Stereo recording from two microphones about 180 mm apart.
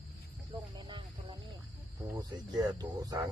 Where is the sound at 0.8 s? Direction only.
25° right (ahead or behind).